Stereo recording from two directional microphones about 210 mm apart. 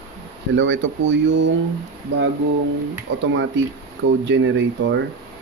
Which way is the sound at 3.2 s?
65° right (ahead or behind).